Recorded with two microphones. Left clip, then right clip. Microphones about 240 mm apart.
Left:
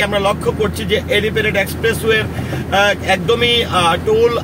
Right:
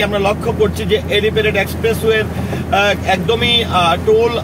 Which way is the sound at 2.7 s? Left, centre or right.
Left.